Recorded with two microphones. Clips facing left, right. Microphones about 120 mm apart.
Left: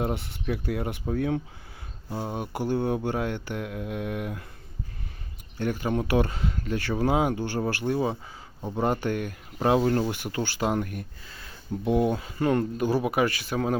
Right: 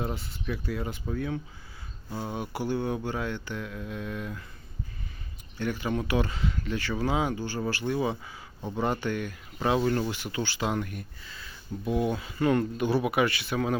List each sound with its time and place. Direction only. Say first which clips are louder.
0.0 s mantra: left 4 dB; 65° left (ahead or behind)
2.2 s speech: left 1 dB; 5° left (ahead or behind)
2.5 s mantra: left 4 dB; 50° left (ahead or behind)
5.5 s speech: left 3 dB; 45° left (ahead or behind); by 7.6 s 65° left (ahead or behind)
7.7 s mantra: left 2 dB; 55° left (ahead or behind)
8.8 s speech: left 3 dB; 45° left (ahead or behind)
11.4 s a sound: left 5 dB; 50° left (ahead or behind)
12.1 s speech: left 1 dB; 40° left (ahead or behind)